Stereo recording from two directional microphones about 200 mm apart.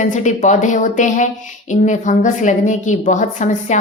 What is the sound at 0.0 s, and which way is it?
A woman's voice, 35° left (ahead or behind).